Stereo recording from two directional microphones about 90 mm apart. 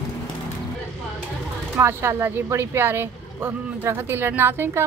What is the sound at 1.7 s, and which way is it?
A woman's voice, 30° right (ahead or behind).